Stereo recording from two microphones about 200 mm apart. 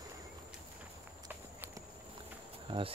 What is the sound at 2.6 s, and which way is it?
Insect, 25° right (ahead or behind).